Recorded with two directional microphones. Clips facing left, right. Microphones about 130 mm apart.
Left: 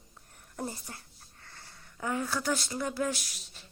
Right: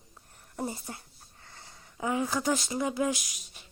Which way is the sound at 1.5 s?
15° right (ahead or behind).